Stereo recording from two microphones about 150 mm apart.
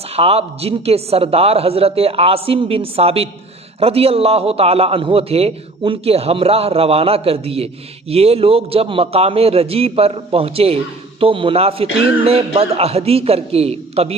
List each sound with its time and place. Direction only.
0.1 s a man's voice: 40° right (ahead or behind)